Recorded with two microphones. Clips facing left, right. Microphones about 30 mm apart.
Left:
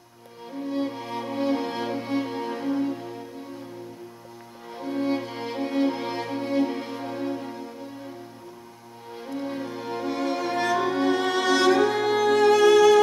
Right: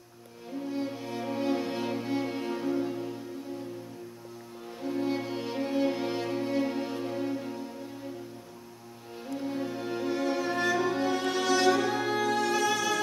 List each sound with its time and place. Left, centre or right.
0.7 s music: left
4.7 s music: left
9.3 s music: left
9.6 s music: left